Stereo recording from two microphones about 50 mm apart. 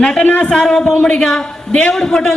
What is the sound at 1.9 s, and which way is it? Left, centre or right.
Speech, centre.